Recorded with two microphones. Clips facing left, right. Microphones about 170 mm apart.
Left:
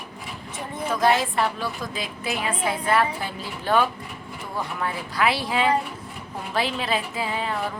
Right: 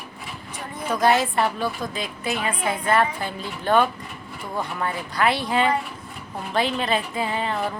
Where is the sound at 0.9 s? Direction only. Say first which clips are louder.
Right 2 dB; centre (ahead or behind).